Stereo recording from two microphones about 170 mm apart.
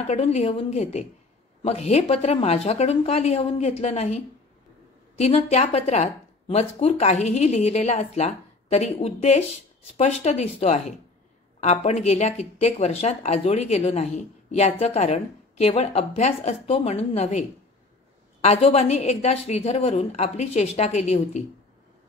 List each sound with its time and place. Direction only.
0.0 s speech: 40° left (ahead or behind)